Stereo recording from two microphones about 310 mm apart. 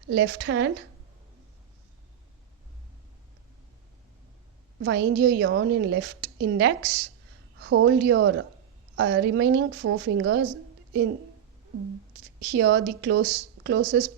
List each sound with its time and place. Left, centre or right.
0.1 s a woman's voice: right
4.8 s a woman's voice: right
12.4 s a woman's voice: right